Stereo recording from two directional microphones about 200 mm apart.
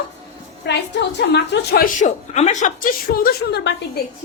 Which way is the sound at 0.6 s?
60° left (ahead or behind).